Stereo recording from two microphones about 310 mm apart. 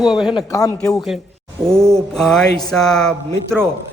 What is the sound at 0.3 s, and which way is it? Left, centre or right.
A man's voice, centre.